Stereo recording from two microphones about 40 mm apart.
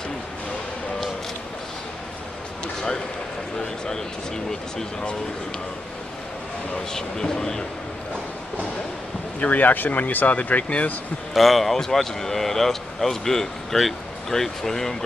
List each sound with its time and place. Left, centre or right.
2.6 s basketball bounce: left
3.5 s speech: centre
6.9 s speech: centre
9.4 s speech: left
11.3 s speech: centre